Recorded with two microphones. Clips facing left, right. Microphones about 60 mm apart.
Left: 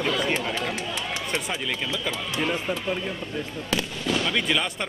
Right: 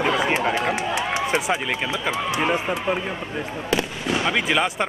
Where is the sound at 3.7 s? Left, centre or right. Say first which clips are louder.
Right 3 dB; right.